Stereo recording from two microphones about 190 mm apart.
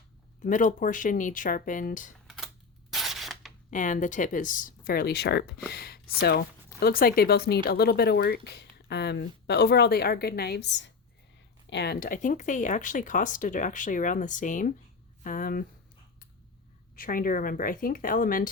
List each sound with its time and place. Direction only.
0.4 s speech: 45° left (ahead or behind)
2.9 s a sound: centre (ahead or behind)
3.7 s speech: 45° left (ahead or behind); by 10.9 s 70° left (ahead or behind)
11.7 s speech: 60° left (ahead or behind)
16.9 s speech: 45° left (ahead or behind)